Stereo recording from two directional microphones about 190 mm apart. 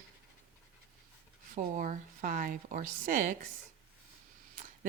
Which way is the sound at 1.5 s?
45° right (ahead or behind).